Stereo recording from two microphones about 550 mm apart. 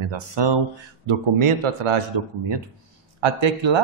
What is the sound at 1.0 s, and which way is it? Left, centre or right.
A man's voice, right.